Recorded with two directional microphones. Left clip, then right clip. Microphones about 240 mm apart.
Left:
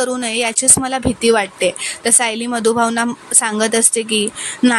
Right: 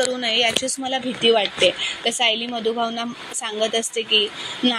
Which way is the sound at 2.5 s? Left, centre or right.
Left.